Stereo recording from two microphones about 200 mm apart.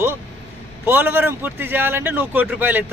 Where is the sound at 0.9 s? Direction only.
10° right (ahead or behind).